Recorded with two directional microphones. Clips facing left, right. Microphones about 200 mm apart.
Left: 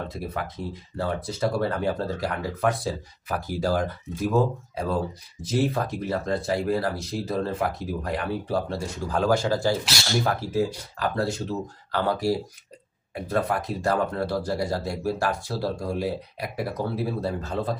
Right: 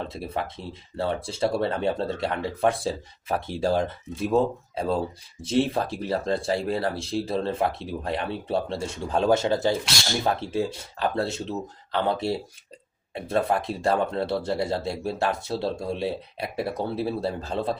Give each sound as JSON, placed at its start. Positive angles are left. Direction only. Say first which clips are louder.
{"t": 0.1, "sound": "speech", "louder": "right 1 dB", "side_deg": -25}